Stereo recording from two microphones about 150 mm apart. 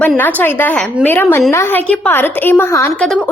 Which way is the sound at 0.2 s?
10° left (ahead or behind).